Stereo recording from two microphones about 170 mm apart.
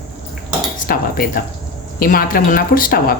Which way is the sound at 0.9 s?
60° left (ahead or behind).